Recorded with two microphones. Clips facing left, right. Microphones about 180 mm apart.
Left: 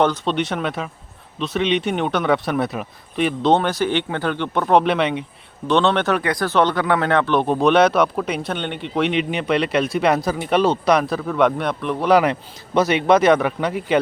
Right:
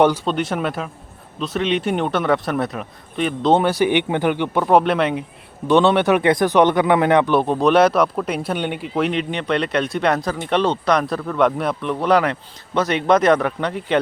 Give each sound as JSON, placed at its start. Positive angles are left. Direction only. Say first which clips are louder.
{"t": 0.3, "sound": "speech", "louder": "even", "side_deg": 0}
{"t": 7.4, "sound": "speech", "louder": "even", "side_deg": 0}
{"t": 12.2, "sound": "a man's voice", "louder": "left 2 dB", "side_deg": 10}